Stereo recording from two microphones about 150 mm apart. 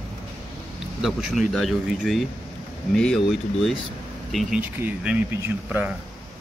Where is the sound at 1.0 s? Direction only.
Centre (ahead or behind).